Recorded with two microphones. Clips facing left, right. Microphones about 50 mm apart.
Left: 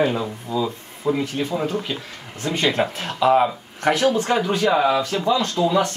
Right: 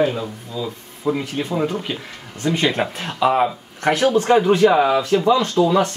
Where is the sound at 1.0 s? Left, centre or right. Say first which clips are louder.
Even; centre.